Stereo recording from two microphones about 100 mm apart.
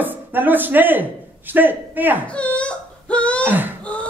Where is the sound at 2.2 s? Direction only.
10° left (ahead or behind).